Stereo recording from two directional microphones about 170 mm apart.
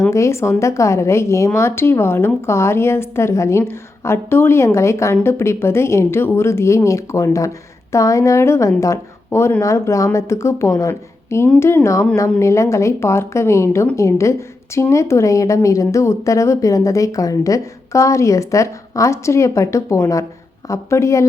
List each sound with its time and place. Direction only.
0.1 s a woman's voice: 15° left (ahead or behind)